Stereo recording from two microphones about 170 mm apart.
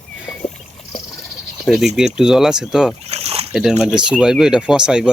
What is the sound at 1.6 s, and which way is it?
Speech, centre (ahead or behind).